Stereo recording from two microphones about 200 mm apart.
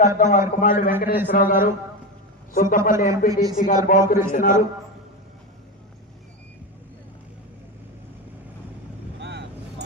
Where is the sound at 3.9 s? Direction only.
45° left (ahead or behind).